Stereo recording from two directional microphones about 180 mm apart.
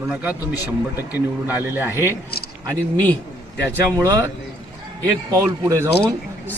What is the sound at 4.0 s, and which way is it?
A man's voice, 15° right (ahead or behind).